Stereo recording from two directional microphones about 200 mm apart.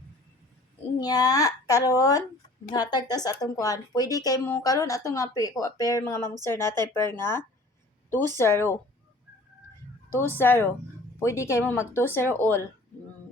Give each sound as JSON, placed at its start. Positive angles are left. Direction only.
{"t": 0.9, "sound": "speech", "side_deg": 20}
{"t": 10.1, "sound": "speech", "side_deg": 10}